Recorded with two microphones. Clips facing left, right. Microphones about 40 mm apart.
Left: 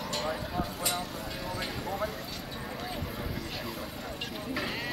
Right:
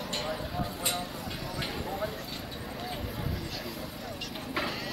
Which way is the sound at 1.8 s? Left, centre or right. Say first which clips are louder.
Left 2 dB; centre.